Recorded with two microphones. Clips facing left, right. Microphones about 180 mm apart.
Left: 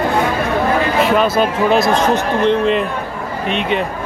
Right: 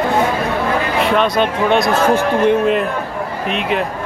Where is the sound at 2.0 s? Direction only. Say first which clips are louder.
Right 1 dB; 10° right (ahead or behind).